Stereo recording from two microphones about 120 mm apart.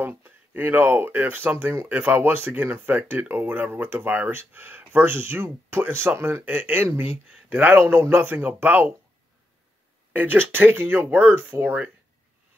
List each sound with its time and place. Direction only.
0.0 s speech: 15° right (ahead or behind)
10.1 s speech: 15° right (ahead or behind)